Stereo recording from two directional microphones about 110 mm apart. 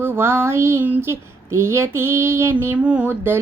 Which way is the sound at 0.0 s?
20° right (ahead or behind).